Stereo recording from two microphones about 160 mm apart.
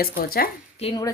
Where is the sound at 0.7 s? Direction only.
40° left (ahead or behind).